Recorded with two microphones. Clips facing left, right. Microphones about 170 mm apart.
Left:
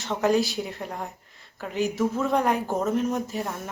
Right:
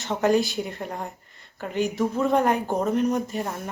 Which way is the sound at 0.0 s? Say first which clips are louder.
Right 1 dB; centre (ahead or behind).